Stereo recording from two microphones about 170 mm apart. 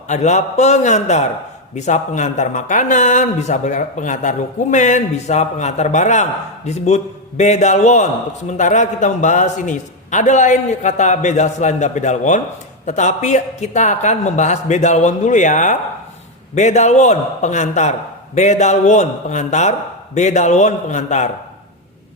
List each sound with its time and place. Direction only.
0.1 s a man's voice: 45° left (ahead or behind)